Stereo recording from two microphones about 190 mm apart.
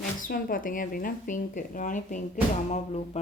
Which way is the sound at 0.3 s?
50° left (ahead or behind).